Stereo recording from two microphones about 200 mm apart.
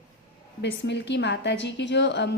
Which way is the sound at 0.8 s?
60° left (ahead or behind).